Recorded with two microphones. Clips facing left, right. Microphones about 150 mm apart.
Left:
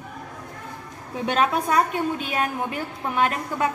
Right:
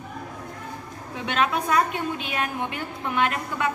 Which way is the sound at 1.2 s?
40° left (ahead or behind).